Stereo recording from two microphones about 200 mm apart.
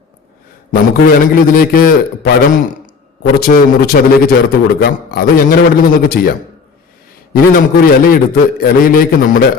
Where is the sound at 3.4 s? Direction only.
45° left (ahead or behind).